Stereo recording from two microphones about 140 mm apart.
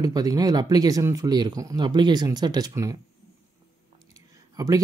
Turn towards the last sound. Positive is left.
turn(degrees=-25)  # may be behind; listen again after turning